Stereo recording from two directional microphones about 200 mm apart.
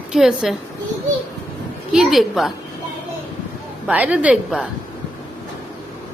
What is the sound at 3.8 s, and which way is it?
Speech, 5° right (ahead or behind).